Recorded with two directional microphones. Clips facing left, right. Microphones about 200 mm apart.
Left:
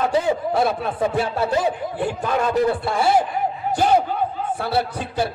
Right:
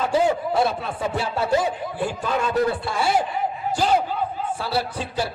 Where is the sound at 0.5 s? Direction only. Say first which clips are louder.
Left 2 dB; 55° left (ahead or behind).